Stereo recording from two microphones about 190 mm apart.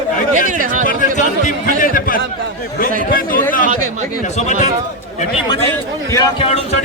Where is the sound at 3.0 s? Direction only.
50° left (ahead or behind).